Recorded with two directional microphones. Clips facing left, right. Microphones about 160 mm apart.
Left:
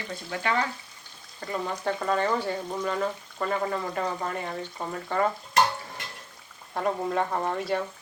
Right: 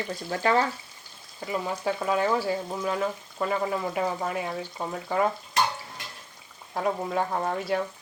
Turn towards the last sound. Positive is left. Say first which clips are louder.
# even
turn(degrees=0)  # may be behind; listen again after turning